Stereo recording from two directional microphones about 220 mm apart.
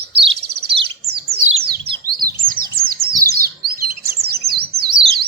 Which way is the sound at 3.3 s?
45° right (ahead or behind).